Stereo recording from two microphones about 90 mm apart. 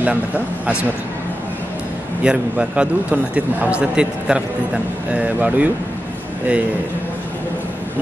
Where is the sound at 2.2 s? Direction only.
15° right (ahead or behind).